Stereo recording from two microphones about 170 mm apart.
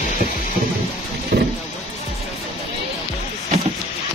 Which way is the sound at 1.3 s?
70° right (ahead or behind).